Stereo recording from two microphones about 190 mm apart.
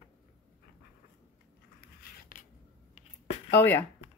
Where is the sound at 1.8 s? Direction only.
50° left (ahead or behind).